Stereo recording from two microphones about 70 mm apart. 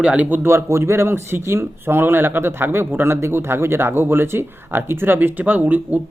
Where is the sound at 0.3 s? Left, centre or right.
Right.